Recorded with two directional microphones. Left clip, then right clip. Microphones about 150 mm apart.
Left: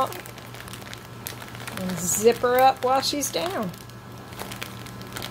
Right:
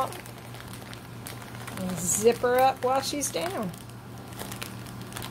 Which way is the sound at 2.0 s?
5° left (ahead or behind).